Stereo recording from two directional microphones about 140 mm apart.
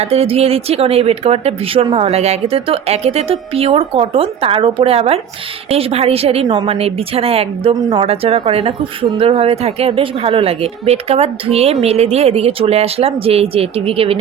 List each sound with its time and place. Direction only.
0.0 s speech: 45° right (ahead or behind)